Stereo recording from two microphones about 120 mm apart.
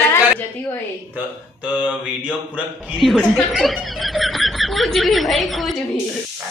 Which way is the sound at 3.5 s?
Centre (ahead or behind).